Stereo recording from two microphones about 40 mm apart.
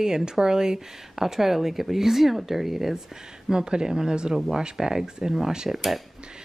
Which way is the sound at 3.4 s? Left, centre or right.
Right.